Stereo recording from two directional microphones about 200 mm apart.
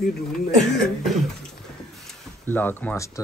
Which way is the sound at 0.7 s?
Centre (ahead or behind).